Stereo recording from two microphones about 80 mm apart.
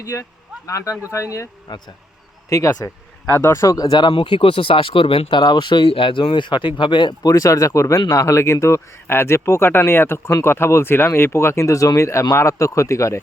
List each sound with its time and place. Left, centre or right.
0.0 s speech: left
1.7 s speech: left
2.5 s speech: left
3.2 s speech: left